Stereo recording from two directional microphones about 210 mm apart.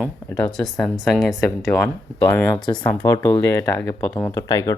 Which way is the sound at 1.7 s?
15° left (ahead or behind).